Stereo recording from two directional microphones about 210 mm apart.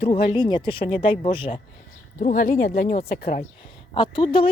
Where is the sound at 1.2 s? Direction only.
25° left (ahead or behind).